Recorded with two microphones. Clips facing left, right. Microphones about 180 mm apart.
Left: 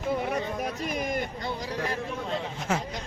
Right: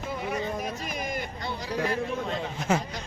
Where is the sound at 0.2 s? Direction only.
55° left (ahead or behind).